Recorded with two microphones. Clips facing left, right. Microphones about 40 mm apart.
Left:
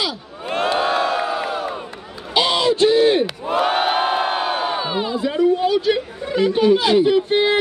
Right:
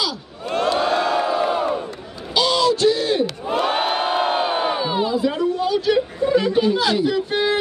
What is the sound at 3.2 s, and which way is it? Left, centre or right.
Crowd, centre.